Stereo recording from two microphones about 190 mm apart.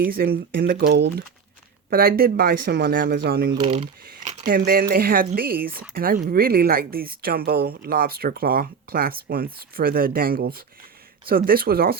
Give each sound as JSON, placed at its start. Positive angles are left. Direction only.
{"t": 0.0, "sound": "speech", "side_deg": -55}
{"t": 1.9, "sound": "speech", "side_deg": -50}
{"t": 3.7, "sound": "speech", "side_deg": -40}
{"t": 4.5, "sound": "speech", "side_deg": -50}